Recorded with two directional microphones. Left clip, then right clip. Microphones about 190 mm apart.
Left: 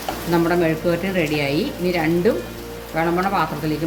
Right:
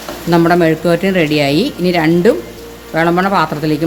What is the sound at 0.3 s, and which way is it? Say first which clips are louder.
Speech: right 8 dB; 60° right (ahead or behind).